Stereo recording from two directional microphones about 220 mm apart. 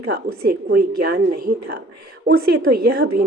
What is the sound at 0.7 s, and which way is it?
Speech, 45° right (ahead or behind).